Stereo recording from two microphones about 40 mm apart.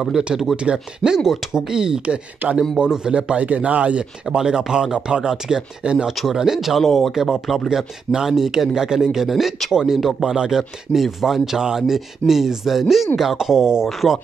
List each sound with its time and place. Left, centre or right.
0.1 s speech: right
2.4 s speech: right
2.9 s speech: right
4.4 s speech: centre
6.8 s speech: centre
9.3 s speech: centre
10.3 s speech: centre
10.9 s speech: centre